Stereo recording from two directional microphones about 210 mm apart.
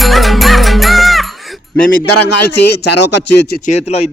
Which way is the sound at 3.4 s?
45° left (ahead or behind).